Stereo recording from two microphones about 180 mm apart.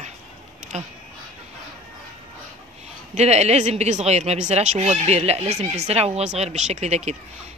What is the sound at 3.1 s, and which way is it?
Speech, 35° right (ahead or behind).